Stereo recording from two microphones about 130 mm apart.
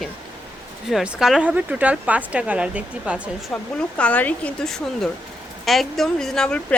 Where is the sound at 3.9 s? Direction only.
10° left (ahead or behind).